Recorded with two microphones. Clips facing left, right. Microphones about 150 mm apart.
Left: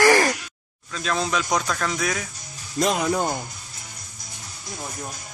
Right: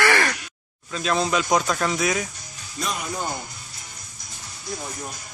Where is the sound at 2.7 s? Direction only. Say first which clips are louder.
Left 8 dB; 90° left.